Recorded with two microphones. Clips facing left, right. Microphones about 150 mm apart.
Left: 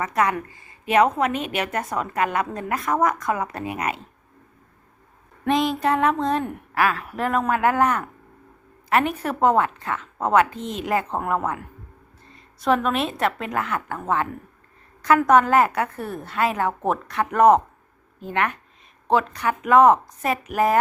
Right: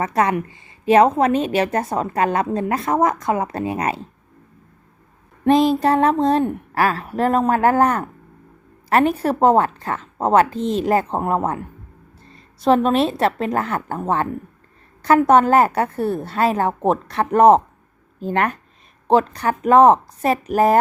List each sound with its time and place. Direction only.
0.0 s a woman's voice: 30° right (ahead or behind)
5.5 s a woman's voice: 35° right (ahead or behind)